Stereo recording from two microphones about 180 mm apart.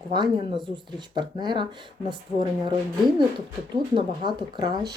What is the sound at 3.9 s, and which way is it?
Speech, 25° right (ahead or behind).